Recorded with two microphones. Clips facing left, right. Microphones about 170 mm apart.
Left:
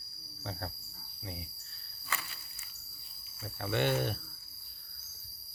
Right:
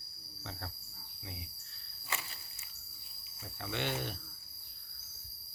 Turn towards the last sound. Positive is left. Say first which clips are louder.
# left 7 dB
turn(degrees=50)  # may be behind; listen again after turning